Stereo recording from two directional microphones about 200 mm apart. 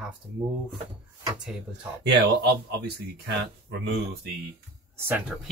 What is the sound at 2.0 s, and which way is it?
Speech, 60° right (ahead or behind).